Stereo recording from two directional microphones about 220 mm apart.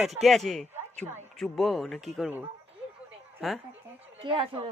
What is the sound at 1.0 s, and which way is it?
Speech, 10° right (ahead or behind).